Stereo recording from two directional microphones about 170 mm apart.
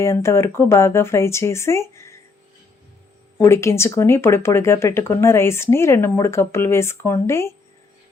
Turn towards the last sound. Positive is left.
turn(degrees=15)  # may be behind; listen again after turning